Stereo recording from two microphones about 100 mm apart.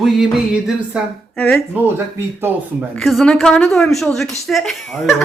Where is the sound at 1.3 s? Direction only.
15° left (ahead or behind).